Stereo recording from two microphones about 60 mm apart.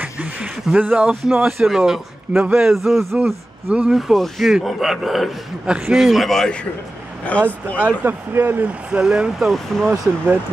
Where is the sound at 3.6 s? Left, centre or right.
Right.